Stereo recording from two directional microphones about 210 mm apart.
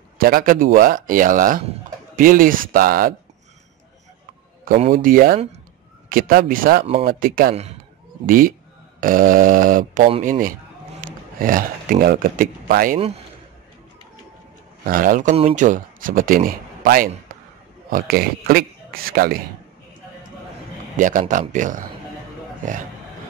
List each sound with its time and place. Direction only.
0.2 s speech: 45° right (ahead or behind)
4.9 s speech: 40° right (ahead or behind)
14.9 s a man's voice: 40° right (ahead or behind)
21.0 s speech: 40° right (ahead or behind)